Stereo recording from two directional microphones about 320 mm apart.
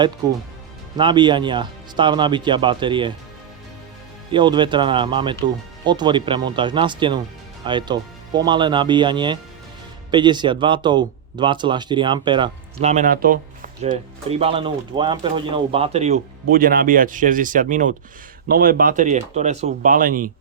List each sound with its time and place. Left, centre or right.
0.9 s speech: centre
4.3 s speech: centre